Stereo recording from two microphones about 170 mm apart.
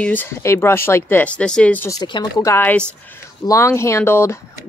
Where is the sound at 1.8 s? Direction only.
25° left (ahead or behind).